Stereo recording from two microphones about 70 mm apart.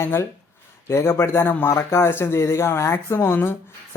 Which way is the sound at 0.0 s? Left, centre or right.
Left.